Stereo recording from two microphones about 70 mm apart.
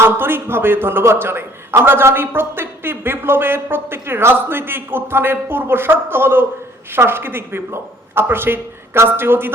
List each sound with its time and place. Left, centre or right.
0.0 s a man's voice: right